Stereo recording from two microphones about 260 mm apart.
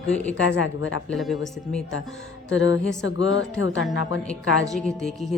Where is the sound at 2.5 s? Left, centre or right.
Left.